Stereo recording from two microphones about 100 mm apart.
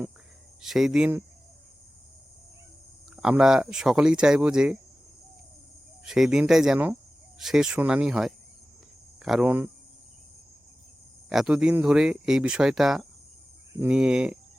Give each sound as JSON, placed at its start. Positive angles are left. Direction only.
{"t": 0.6, "sound": "speech", "side_deg": -5}
{"t": 3.2, "sound": "speech", "side_deg": -5}
{"t": 6.1, "sound": "speech", "side_deg": -5}
{"t": 11.3, "sound": "speech", "side_deg": -5}